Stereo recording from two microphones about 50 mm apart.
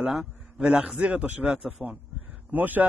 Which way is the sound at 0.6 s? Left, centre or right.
Right.